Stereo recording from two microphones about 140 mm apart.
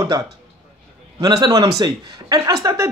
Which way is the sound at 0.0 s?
30° right (ahead or behind).